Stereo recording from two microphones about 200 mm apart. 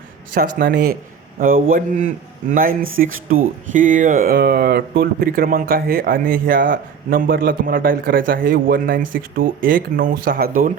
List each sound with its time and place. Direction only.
0.3 s speech: 45° right (ahead or behind)